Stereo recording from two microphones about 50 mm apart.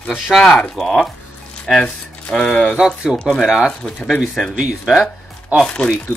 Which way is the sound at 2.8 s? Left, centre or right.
Centre.